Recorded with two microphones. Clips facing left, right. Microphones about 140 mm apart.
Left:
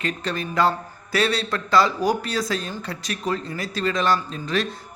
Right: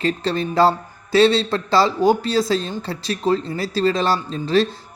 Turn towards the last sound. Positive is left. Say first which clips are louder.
# right 7 dB
turn(degrees=-30)  # may be behind; listen again after turning